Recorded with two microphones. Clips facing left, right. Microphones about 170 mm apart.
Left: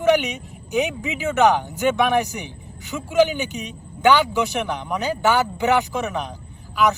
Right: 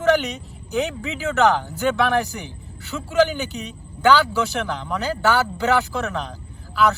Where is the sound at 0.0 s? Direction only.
15° left (ahead or behind).